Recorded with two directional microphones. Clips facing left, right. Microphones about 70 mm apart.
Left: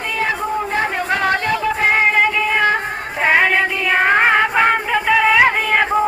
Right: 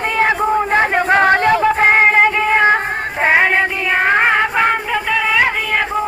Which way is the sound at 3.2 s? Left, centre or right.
Centre.